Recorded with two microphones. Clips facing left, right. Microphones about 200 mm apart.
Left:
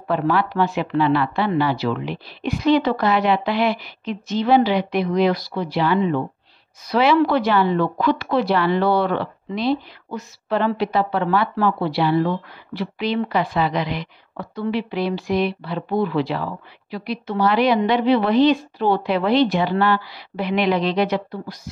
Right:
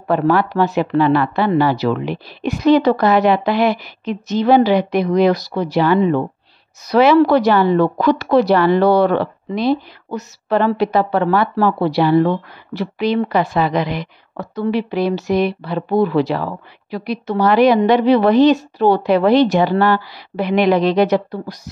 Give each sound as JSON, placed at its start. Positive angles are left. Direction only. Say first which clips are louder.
{"t": 0.1, "sound": "speech", "louder": "right 5 dB", "side_deg": -45}